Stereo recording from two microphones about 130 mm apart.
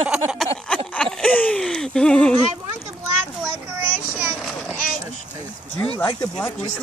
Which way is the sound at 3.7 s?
10° right (ahead or behind).